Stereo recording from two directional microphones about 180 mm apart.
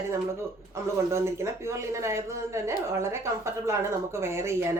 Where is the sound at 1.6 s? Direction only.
15° right (ahead or behind).